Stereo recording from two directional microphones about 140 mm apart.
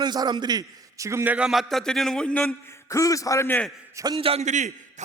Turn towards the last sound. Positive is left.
turn(degrees=-60)  # may be behind; listen again after turning